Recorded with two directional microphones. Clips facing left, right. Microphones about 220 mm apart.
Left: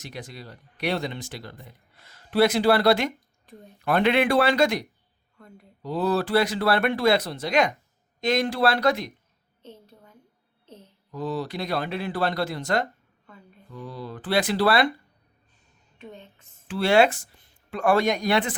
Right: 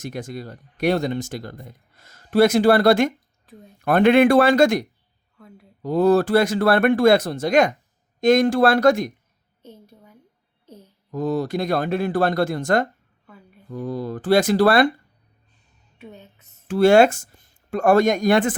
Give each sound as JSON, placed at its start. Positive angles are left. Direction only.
{"t": 0.0, "sound": "speech", "side_deg": -45}
{"t": 3.4, "sound": "a sound", "side_deg": 0}
{"t": 3.8, "sound": "speech", "side_deg": -50}
{"t": 5.4, "sound": "speech", "side_deg": 0}
{"t": 5.8, "sound": "speech", "side_deg": -50}
{"t": 9.6, "sound": "a sound", "side_deg": -10}
{"t": 11.1, "sound": "speech", "side_deg": -45}
{"t": 16.0, "sound": "music", "side_deg": -10}
{"t": 16.6, "sound": "speech", "side_deg": -45}